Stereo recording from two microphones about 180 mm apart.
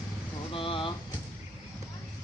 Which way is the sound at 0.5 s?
30° left (ahead or behind).